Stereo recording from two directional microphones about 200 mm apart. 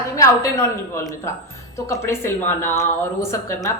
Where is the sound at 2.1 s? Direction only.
10° left (ahead or behind).